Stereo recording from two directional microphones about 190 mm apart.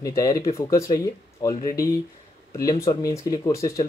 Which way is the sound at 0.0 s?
20° left (ahead or behind).